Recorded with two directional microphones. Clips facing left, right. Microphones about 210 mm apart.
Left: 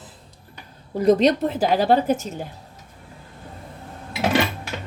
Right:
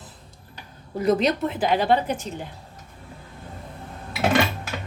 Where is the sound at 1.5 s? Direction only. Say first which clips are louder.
Left 2 dB; 40° left (ahead or behind).